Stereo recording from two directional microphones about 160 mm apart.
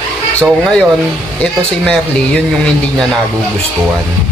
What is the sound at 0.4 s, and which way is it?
A man's voice, 5° left (ahead or behind).